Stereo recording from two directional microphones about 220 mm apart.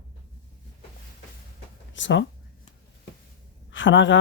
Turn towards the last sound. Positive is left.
turn(degrees=55)  # may be behind; listen again after turning